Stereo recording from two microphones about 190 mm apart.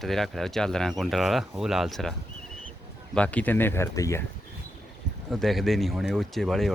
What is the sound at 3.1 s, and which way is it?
Speech, 5° left (ahead or behind).